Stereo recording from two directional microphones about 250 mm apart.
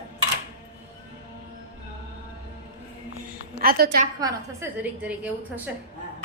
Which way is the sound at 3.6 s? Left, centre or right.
Right.